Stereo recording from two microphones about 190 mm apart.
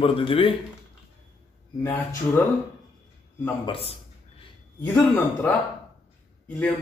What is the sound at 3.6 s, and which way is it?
Speech, 30° left (ahead or behind).